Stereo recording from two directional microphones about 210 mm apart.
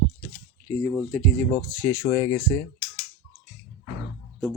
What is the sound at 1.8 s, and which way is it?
Speech, 10° left (ahead or behind).